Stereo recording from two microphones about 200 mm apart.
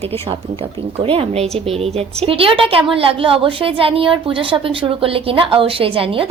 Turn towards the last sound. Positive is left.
turn(degrees=-25)  # may be behind; listen again after turning